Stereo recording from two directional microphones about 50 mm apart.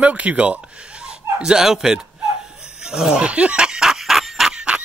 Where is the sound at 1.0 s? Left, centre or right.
Centre.